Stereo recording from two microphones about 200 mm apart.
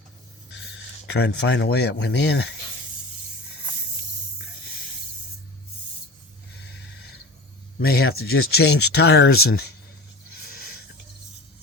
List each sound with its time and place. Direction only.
0.5 s speech: 60° left (ahead or behind)
7.8 s speech: 50° left (ahead or behind)